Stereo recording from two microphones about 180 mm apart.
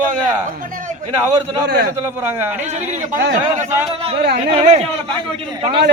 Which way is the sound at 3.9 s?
30° right (ahead or behind).